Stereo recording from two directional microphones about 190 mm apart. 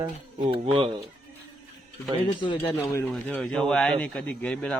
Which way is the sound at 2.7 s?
15° left (ahead or behind).